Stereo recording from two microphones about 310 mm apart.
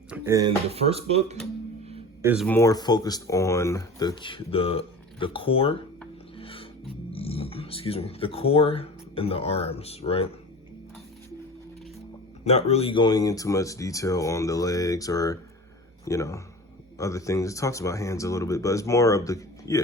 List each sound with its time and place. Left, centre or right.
0.1 s speech: centre
2.2 s speech: centre
6.3 s music: centre
7.1 s speech: centre
12.5 s speech: centre